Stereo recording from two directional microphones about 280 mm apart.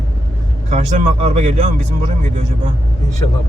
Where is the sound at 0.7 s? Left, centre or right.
Right.